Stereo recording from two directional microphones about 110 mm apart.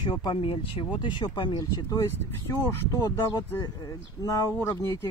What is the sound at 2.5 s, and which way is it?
Speech, 30° left (ahead or behind).